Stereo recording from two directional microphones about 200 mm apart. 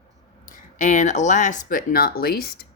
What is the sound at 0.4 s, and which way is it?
Speech, 35° left (ahead or behind).